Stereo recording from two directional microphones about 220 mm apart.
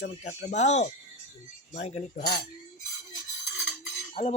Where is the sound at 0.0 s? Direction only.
35° left (ahead or behind).